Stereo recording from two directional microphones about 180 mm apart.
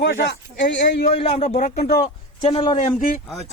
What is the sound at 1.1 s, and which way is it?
A man's voice, 30° left (ahead or behind).